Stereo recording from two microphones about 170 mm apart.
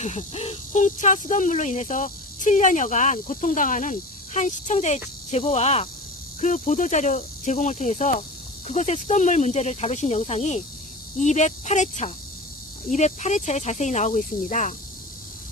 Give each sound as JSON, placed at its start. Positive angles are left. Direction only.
{"t": 0.0, "sound": "speech", "side_deg": 40}
{"t": 6.4, "sound": "speech", "side_deg": 50}